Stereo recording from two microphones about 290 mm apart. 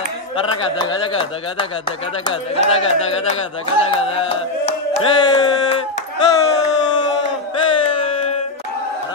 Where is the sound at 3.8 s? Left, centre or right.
Centre.